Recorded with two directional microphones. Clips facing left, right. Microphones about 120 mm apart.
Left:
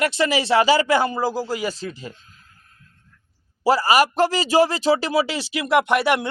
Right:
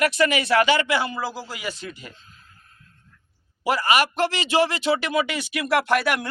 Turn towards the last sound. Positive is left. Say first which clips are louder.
# left 3 dB
turn(degrees=25)  # may be behind; listen again after turning